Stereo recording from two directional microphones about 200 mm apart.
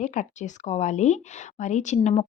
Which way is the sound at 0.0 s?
40° left (ahead or behind).